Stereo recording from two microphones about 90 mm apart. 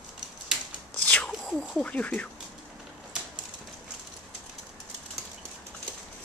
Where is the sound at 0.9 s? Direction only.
15° left (ahead or behind).